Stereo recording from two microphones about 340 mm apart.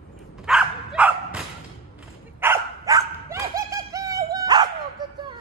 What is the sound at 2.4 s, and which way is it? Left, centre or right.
Dog, centre.